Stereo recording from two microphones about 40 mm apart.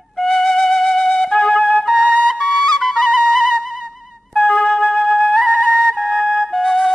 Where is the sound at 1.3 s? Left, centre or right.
Centre.